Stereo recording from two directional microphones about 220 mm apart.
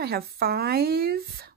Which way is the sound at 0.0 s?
45° right (ahead or behind).